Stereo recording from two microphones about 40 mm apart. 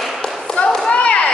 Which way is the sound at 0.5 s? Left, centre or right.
Left.